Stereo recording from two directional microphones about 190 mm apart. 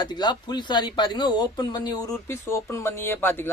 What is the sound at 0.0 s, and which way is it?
Speech, 20° left (ahead or behind).